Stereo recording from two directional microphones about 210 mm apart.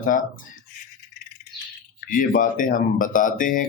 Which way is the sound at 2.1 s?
40° left (ahead or behind).